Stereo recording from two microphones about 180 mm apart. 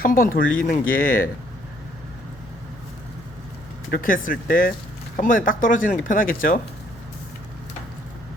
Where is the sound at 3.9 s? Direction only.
50° left (ahead or behind).